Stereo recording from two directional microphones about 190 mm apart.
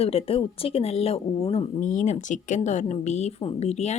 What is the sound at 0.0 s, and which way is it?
A woman's voice, 30° left (ahead or behind).